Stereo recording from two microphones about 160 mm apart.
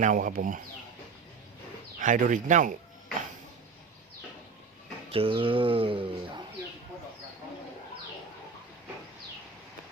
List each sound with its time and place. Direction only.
0.0 s speech: 55° right (ahead or behind)
2.0 s speech: 55° right (ahead or behind)
5.1 s speech: 35° right (ahead or behind)